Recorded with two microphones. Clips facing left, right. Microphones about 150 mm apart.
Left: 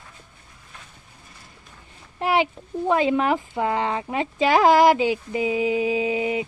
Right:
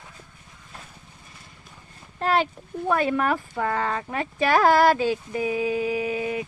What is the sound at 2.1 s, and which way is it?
Speech, 15° left (ahead or behind).